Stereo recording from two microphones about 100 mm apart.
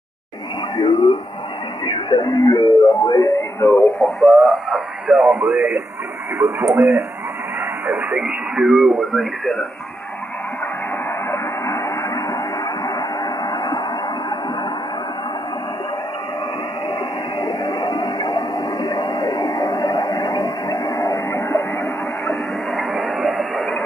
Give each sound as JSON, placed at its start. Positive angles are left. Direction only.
{"t": 0.8, "sound": "speech", "side_deg": 50}
{"t": 1.9, "sound": "speech", "side_deg": 40}
{"t": 4.0, "sound": "speech", "side_deg": 0}
{"t": 4.7, "sound": "speech", "side_deg": -15}
{"t": 6.6, "sound": "speech", "side_deg": 0}
{"t": 7.8, "sound": "speech", "side_deg": -15}
{"t": 8.7, "sound": "speech", "side_deg": 0}
{"t": 11.3, "sound": "a sound", "side_deg": 30}
{"t": 12.8, "sound": "vehicle", "side_deg": 40}
{"t": 17.4, "sound": "a sound", "side_deg": 45}
{"t": 23.5, "sound": "a sound", "side_deg": 0}